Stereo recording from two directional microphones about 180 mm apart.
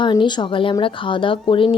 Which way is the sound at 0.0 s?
25° left (ahead or behind).